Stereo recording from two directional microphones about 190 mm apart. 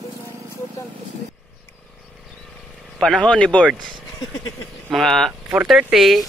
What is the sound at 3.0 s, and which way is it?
Speech, 5° left (ahead or behind).